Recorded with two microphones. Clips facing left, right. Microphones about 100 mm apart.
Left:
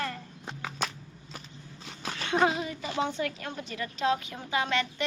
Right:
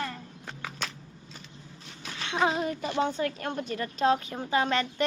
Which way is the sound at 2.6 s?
45° right (ahead or behind).